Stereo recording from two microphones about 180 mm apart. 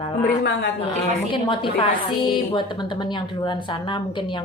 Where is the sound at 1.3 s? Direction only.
30° left (ahead or behind).